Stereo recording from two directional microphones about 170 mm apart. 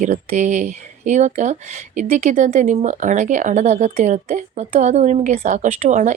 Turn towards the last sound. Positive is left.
turn(degrees=-45)  # may be behind; listen again after turning